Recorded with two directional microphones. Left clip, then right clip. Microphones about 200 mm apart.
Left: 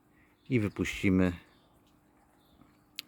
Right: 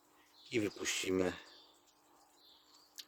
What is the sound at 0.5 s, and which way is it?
Speech, centre (ahead or behind).